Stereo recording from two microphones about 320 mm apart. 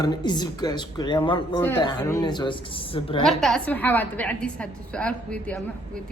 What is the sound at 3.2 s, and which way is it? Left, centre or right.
A woman's voice, centre.